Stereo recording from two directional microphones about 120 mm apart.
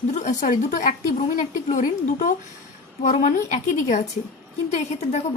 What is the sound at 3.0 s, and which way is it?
Speech, 85° left.